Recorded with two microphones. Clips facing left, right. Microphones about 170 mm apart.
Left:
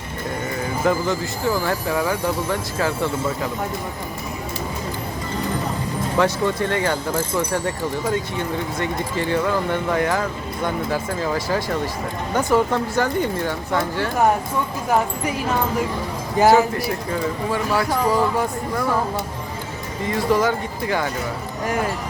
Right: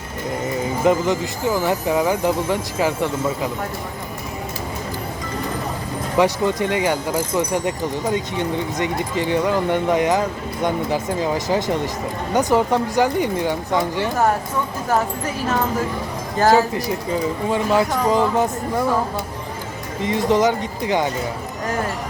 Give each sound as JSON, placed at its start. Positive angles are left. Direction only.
{"t": 0.9, "sound": "speech", "side_deg": -20}
{"t": 6.1, "sound": "speech", "side_deg": -15}
{"t": 8.8, "sound": "speech", "side_deg": -15}
{"t": 16.7, "sound": "speech", "side_deg": -20}
{"t": 20.0, "sound": "speech", "side_deg": -20}